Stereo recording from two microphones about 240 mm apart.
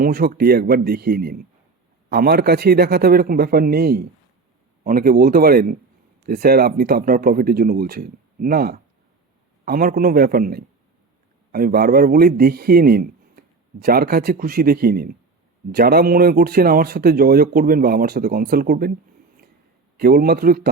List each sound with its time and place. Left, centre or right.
0.0 s a man's voice: right
20.0 s a man's voice: right